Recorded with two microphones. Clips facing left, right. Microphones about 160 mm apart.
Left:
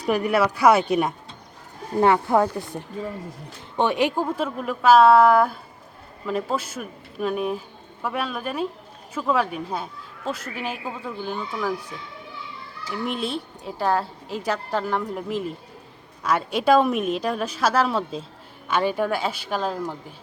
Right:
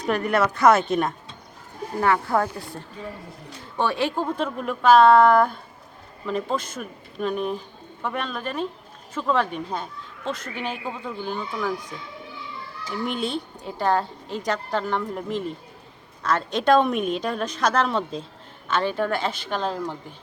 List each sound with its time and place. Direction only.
0.0 s a woman's voice: 10° left (ahead or behind)
2.0 s a woman's voice: 20° left (ahead or behind); by 11.7 s centre (ahead or behind)
13.1 s a woman's voice: centre (ahead or behind)